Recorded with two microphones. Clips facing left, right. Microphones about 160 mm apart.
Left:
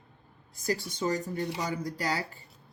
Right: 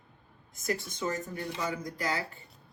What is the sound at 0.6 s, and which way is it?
Speech, 35° left (ahead or behind).